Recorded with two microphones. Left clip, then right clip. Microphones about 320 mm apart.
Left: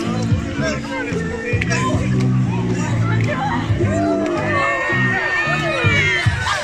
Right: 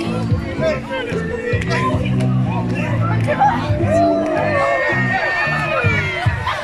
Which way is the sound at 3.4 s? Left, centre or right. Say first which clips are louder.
Right 5 dB; right.